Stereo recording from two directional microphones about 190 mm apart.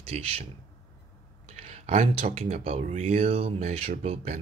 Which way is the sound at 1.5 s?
35° right (ahead or behind).